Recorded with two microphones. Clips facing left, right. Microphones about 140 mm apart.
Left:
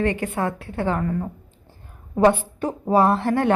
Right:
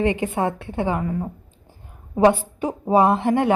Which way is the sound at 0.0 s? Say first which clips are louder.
Right 2 dB; 20° right (ahead or behind).